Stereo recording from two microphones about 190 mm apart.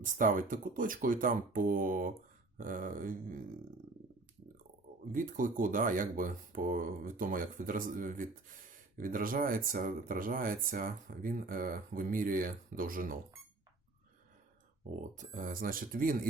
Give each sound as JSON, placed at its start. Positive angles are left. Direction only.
{"t": 0.0, "sound": "speech", "side_deg": -45}
{"t": 5.1, "sound": "speech", "side_deg": -45}
{"t": 14.8, "sound": "speech", "side_deg": -40}